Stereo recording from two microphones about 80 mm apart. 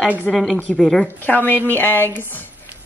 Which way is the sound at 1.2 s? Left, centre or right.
Left.